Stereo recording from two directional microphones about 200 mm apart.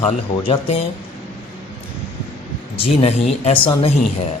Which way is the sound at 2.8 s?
30° left (ahead or behind).